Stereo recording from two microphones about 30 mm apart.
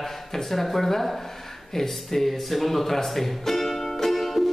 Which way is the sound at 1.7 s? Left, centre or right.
Centre.